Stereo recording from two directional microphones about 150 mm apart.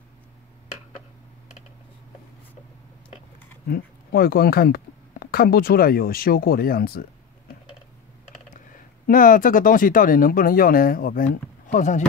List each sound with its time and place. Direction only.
3.6 s speech: 90° left
9.0 s speech: 65° left (ahead or behind)